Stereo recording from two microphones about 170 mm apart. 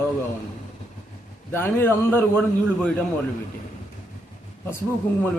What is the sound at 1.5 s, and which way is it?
A man's voice, 10° left (ahead or behind).